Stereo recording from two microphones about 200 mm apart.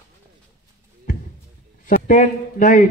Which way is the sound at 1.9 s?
40° left (ahead or behind).